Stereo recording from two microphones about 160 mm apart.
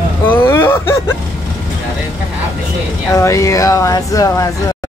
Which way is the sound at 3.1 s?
20° left (ahead or behind).